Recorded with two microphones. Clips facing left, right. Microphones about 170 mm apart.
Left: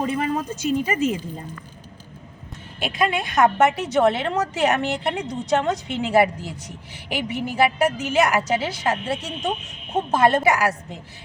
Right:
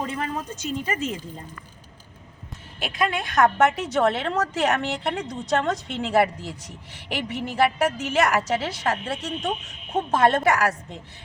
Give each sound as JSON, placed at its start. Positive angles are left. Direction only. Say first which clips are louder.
{"t": 0.0, "sound": "speech", "louder": "left 5 dB", "side_deg": 10}
{"t": 2.8, "sound": "a woman's voice", "louder": "left 3 dB", "side_deg": 0}